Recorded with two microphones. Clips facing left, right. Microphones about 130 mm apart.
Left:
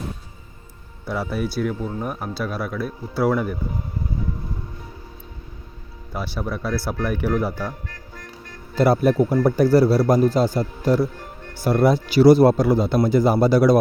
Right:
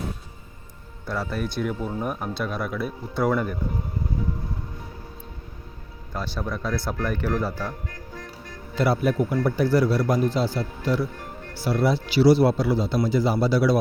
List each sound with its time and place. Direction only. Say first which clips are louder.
1.0 s speech: left 3 dB; 10° left (ahead or behind)
6.1 s speech: left 2 dB; 10° left (ahead or behind)
8.7 s speech: left 5 dB; 40° left (ahead or behind)